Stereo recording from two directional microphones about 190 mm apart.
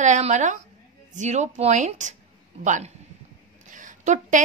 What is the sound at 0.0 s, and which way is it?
A woman's voice, 40° right (ahead or behind).